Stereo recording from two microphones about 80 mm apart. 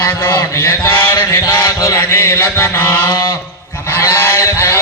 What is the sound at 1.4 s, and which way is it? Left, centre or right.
Speech, left.